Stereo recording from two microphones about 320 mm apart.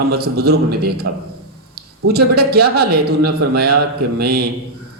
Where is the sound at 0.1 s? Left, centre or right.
Right.